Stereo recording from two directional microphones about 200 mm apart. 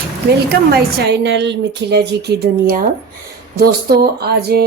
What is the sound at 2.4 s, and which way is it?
Speech, 50° right (ahead or behind).